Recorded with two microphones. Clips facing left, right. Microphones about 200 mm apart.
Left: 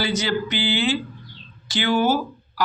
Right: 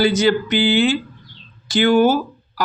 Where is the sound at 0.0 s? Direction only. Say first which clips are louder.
Right 8 dB; 50° right (ahead or behind).